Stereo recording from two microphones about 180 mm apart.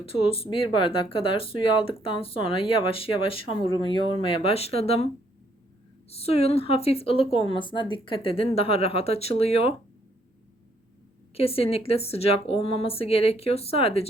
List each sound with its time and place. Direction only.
0.0 s speech: 30° left (ahead or behind)
6.1 s speech: 35° left (ahead or behind)
11.3 s speech: 30° left (ahead or behind)